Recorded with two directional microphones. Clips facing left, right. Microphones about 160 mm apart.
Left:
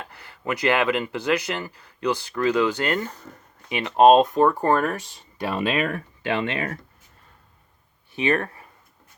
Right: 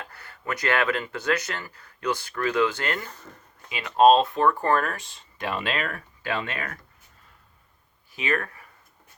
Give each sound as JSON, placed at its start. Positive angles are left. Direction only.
{"t": 0.0, "sound": "speech", "side_deg": 20}
{"t": 8.1, "sound": "speech", "side_deg": 25}